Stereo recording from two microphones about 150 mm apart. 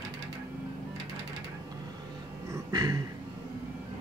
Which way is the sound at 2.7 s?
25° right (ahead or behind).